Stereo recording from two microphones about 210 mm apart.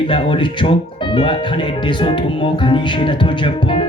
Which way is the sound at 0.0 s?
25° left (ahead or behind).